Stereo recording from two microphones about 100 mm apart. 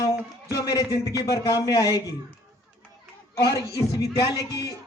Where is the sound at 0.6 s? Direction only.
35° left (ahead or behind).